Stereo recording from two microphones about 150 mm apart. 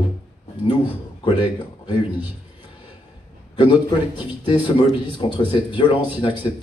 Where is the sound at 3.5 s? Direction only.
35° left (ahead or behind).